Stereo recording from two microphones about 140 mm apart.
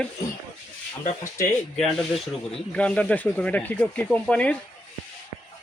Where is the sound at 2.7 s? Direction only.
10° left (ahead or behind).